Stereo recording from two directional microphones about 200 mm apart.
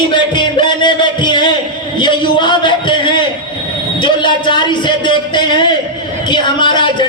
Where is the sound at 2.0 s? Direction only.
25° left (ahead or behind).